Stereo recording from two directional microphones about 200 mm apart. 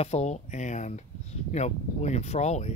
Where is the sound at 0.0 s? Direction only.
30° left (ahead or behind).